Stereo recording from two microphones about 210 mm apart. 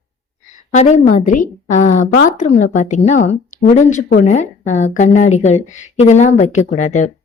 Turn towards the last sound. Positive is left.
turn(degrees=35)  # may be behind; listen again after turning